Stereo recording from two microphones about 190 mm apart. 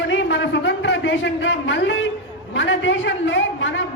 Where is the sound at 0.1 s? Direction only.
70° left (ahead or behind).